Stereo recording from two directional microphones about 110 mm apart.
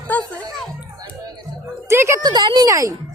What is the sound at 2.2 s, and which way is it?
Speech, 40° right (ahead or behind).